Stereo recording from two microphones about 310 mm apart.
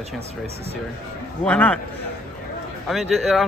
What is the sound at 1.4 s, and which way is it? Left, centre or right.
Speech, centre.